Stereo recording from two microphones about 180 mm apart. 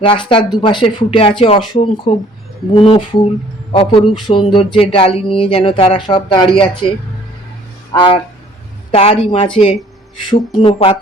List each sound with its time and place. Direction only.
0.0 s speech: 30° left (ahead or behind)
7.9 s speech: 25° left (ahead or behind)